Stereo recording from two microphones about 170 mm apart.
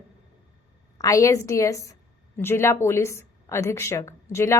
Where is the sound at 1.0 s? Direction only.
20° left (ahead or behind).